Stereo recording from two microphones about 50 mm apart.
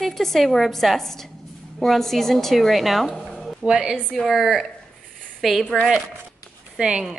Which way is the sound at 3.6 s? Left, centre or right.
Centre.